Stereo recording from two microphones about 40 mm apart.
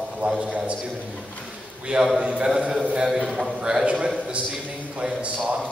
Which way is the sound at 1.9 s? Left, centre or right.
Right.